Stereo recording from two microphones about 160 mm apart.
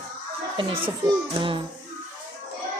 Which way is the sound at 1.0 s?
30° right (ahead or behind).